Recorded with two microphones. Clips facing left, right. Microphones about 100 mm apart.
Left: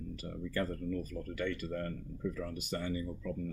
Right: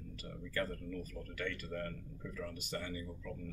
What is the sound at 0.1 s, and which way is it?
Speech, 20° left (ahead or behind).